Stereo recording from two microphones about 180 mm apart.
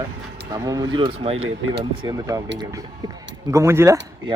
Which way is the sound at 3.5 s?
15° right (ahead or behind).